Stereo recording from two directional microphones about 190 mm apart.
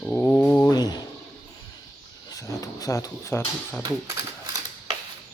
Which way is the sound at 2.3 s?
15° left (ahead or behind).